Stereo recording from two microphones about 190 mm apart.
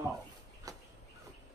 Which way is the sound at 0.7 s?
20° right (ahead or behind).